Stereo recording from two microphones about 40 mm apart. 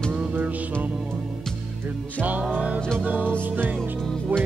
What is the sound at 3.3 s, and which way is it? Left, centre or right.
Music, right.